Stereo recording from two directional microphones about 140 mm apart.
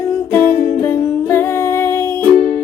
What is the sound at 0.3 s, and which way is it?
Music, 15° left (ahead or behind).